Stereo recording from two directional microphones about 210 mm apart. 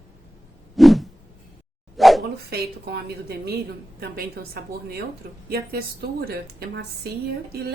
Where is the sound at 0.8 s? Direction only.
Centre (ahead or behind).